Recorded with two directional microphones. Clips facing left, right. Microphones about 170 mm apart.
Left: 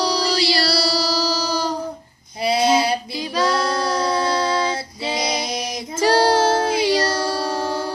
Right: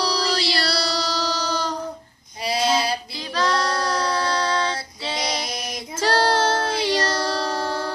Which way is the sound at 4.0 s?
20° left (ahead or behind).